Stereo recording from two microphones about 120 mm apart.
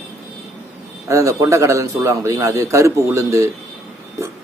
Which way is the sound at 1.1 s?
25° right (ahead or behind).